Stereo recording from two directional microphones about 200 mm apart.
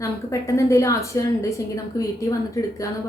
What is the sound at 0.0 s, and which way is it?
A woman's voice, 15° left (ahead or behind).